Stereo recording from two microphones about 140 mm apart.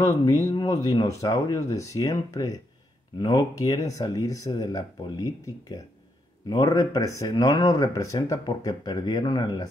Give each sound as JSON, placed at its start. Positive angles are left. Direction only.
{"t": 0.0, "sound": "speech", "side_deg": 25}